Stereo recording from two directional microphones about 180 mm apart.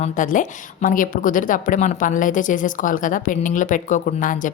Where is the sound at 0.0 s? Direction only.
45° left (ahead or behind).